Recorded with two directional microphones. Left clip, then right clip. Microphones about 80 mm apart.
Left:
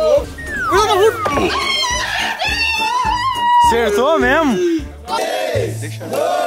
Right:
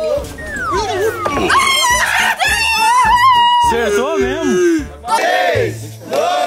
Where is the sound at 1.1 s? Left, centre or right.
Centre.